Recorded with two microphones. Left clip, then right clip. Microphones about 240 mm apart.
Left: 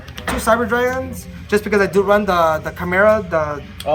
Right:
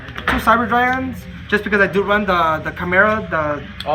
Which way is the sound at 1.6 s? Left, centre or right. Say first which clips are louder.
Left 1 dB; left.